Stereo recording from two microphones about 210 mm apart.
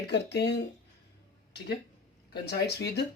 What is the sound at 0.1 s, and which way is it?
Speech, 55° left (ahead or behind).